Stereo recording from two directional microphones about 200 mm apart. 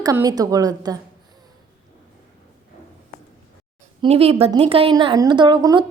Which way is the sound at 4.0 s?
30° right (ahead or behind).